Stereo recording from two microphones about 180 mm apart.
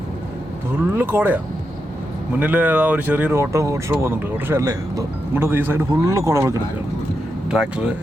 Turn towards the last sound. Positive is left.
turn(degrees=-5)  # may be behind; listen again after turning